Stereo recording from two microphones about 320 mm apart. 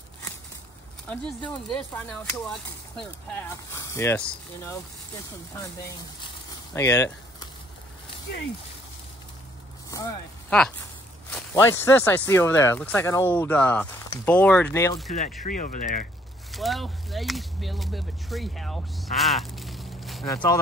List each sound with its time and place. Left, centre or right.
1.0 s speech: centre
6.2 s crumpling: centre
9.8 s speech: centre
15.4 s speech: left
16.5 s speech: centre